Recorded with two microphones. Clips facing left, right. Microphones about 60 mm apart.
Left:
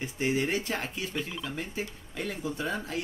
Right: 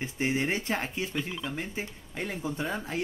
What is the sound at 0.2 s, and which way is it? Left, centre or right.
Speech, right.